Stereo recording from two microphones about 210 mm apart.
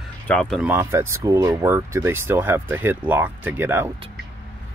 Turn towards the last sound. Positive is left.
turn(degrees=-10)  # may be behind; listen again after turning